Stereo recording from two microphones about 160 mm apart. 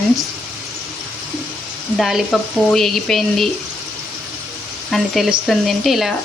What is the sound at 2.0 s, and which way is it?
Speech, centre (ahead or behind).